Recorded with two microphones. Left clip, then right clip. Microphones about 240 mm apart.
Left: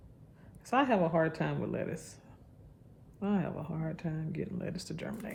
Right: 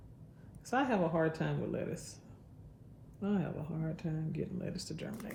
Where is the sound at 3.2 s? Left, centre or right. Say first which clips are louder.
Left 3 dB; left.